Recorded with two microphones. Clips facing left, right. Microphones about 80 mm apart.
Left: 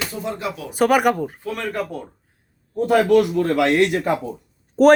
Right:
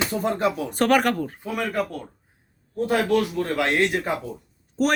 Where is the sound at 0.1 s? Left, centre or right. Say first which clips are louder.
Right 4 dB; right.